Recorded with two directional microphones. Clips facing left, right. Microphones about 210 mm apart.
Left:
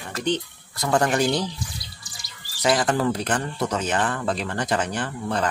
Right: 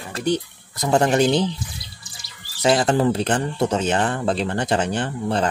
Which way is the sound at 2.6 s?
25° right (ahead or behind).